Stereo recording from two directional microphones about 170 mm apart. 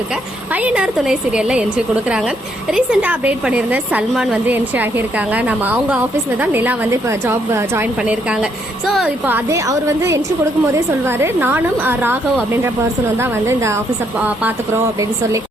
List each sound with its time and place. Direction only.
0.5 s a woman's voice: 5° right (ahead or behind)
2.7 s a woman's voice: 5° right (ahead or behind)
13.1 s a woman's voice: 15° right (ahead or behind)